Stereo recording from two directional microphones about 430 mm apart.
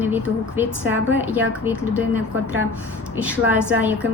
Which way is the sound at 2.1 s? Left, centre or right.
Left.